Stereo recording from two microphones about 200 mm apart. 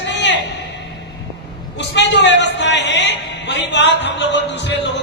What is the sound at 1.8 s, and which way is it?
Speech, 60° left (ahead or behind).